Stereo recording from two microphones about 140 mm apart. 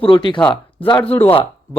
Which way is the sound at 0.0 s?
35° left (ahead or behind).